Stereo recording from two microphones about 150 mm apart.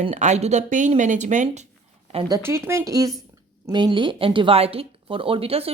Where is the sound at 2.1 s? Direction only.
30° right (ahead or behind).